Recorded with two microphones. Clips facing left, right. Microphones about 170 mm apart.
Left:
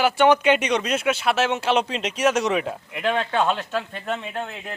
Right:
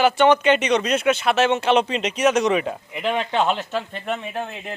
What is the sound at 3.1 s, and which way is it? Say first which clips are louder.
Speech: right 2 dB; 15° right (ahead or behind).